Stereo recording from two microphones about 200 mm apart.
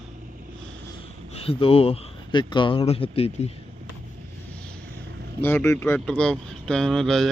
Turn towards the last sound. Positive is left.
turn(degrees=0)  # may be behind; listen again after turning